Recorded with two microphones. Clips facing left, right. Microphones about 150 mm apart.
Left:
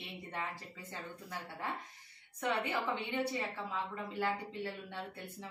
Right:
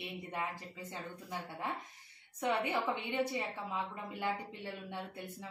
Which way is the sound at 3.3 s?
15° right (ahead or behind).